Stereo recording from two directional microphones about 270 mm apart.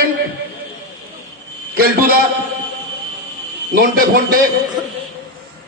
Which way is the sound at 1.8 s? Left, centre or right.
Right.